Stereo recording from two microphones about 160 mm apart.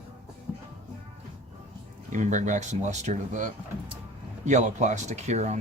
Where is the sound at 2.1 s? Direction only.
50° right (ahead or behind).